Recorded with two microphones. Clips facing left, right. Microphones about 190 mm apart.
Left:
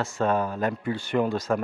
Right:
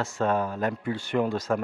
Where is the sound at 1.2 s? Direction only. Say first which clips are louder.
Left 1 dB; 30° left (ahead or behind).